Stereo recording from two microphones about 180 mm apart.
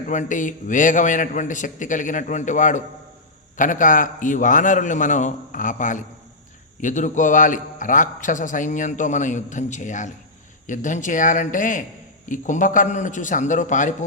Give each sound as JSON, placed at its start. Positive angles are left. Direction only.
{"t": 0.1, "sound": "a man's voice", "side_deg": 45}